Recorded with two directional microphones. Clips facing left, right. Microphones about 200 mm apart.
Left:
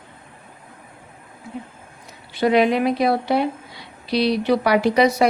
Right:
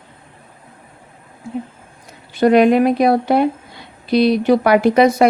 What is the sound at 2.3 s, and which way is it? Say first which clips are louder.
A woman's voice: right 6 dB; 50° right (ahead or behind).